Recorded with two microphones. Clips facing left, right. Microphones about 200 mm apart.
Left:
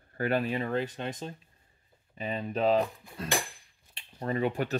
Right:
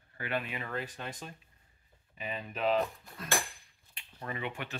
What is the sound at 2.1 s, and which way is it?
Speech, 35° left (ahead or behind).